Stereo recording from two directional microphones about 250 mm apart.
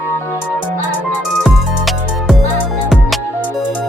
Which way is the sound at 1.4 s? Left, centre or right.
Centre.